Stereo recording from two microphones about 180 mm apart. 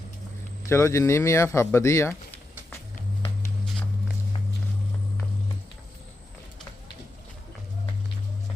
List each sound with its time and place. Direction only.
0.7 s speech: 15° left (ahead or behind)